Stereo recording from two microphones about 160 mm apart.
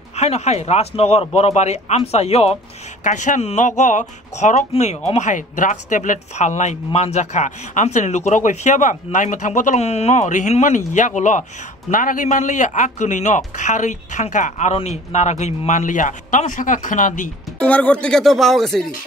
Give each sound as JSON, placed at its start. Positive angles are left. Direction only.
{"t": 0.1, "sound": "speech", "side_deg": 40}
{"t": 17.6, "sound": "speech", "side_deg": 10}